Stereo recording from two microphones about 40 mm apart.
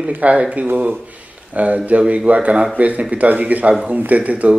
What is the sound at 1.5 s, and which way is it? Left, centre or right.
A man's voice, right.